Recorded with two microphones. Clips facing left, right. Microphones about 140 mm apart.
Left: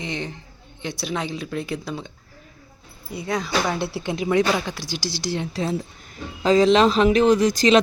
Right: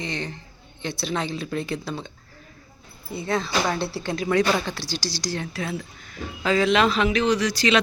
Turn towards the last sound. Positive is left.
turn(degrees=40)  # may be behind; listen again after turning